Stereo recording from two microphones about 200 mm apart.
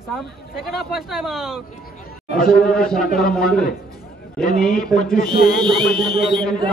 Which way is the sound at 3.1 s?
50° left (ahead or behind).